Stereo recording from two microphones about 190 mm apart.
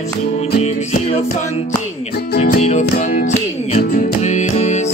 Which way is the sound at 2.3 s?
35° left (ahead or behind).